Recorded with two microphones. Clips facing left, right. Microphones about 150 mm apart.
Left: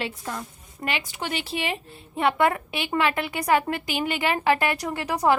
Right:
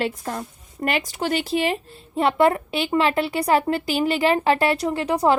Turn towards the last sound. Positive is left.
turn(degrees=-30)  # may be behind; listen again after turning